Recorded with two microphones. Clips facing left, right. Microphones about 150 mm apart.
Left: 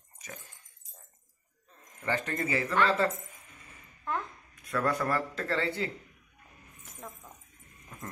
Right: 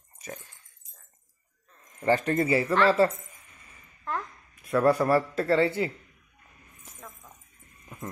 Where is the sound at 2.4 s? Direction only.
30° right (ahead or behind).